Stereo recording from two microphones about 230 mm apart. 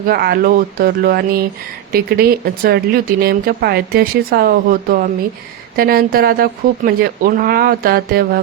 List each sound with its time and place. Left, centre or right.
0.1 s speech: right